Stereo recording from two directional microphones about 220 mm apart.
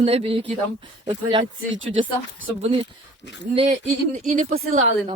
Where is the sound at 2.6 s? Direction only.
25° right (ahead or behind).